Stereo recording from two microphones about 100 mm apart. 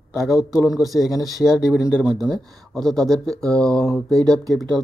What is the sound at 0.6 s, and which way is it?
Speech, 35° left (ahead or behind).